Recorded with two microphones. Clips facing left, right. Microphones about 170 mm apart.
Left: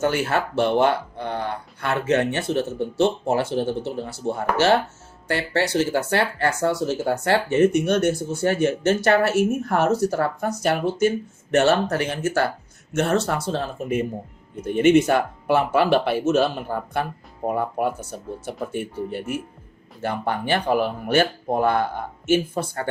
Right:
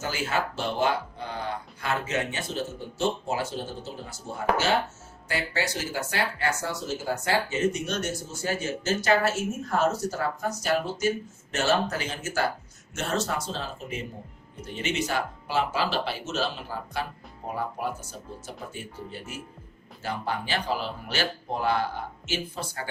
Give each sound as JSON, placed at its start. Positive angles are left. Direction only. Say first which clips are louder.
{"t": 0.0, "sound": "speech", "louder": "left 7 dB", "side_deg": 65}